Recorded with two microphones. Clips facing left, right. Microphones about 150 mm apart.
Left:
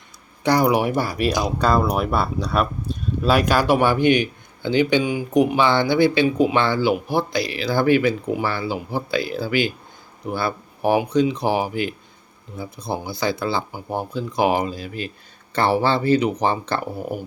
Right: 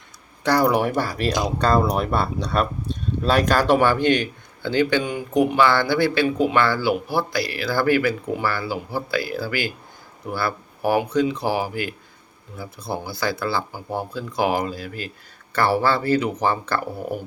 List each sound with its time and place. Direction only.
0.4 s speech: 15° left (ahead or behind)